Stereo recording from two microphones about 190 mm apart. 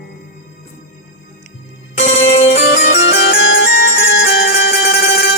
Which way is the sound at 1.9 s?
40° left (ahead or behind).